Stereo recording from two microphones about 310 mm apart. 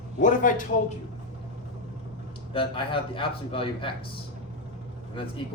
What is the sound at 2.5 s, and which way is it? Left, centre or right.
A man's voice, centre.